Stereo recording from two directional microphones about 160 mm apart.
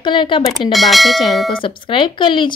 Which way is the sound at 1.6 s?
30° left (ahead or behind).